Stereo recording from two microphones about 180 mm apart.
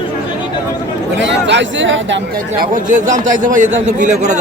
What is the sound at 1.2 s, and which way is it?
Speech, 85° right.